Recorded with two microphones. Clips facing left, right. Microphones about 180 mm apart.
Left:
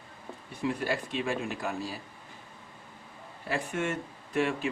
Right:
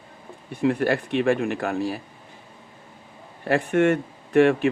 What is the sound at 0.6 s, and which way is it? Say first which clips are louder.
Speech: right 9 dB; 65° right (ahead or behind).